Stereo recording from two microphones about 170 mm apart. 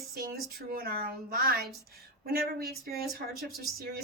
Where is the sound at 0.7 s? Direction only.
65° right (ahead or behind).